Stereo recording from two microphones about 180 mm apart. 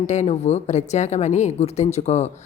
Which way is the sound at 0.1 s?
40° left (ahead or behind).